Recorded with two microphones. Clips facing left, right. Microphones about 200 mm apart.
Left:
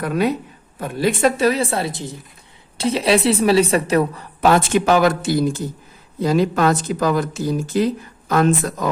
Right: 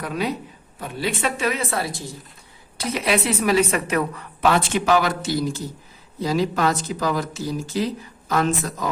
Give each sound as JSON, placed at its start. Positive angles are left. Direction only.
{"t": 0.0, "sound": "a woman's voice", "side_deg": 55}